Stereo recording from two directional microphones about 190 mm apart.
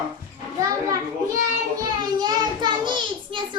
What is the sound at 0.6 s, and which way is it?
Child singing, 20° right (ahead or behind).